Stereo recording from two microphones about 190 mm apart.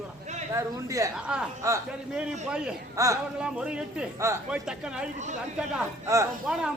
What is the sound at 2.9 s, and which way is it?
Speech, 15° right (ahead or behind).